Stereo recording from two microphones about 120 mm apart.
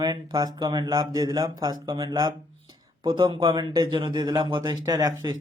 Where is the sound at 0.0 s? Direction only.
35° right (ahead or behind).